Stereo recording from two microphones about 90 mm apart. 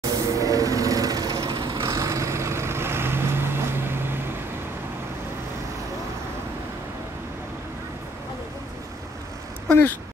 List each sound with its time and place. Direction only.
0.0 s vehicle: 40° right (ahead or behind); by 4.2 s 25° right (ahead or behind)
9.7 s speech: 20° left (ahead or behind)